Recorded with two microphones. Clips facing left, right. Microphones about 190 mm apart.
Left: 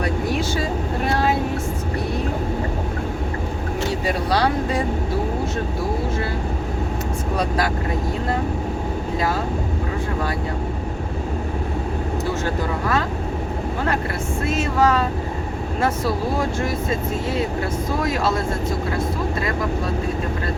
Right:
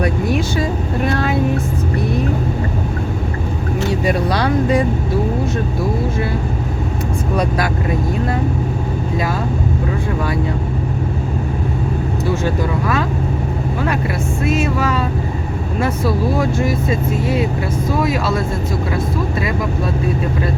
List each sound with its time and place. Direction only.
0.0 s speech: 15° right (ahead or behind)
14.4 s speech: 10° right (ahead or behind)
16.6 s speech: 10° right (ahead or behind)